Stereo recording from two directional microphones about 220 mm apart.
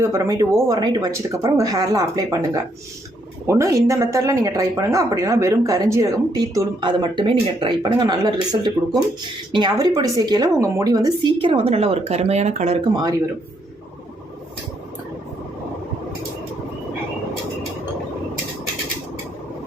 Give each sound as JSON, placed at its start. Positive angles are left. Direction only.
{"t": 0.0, "sound": "a woman's voice", "side_deg": -15}